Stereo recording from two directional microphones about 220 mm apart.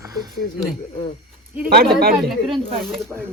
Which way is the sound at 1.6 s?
45° right (ahead or behind).